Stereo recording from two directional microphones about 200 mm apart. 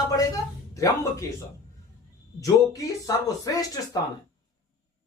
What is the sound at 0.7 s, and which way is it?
Speech, 15° left (ahead or behind).